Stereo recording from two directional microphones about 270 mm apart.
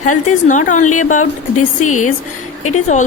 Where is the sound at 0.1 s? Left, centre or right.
Left.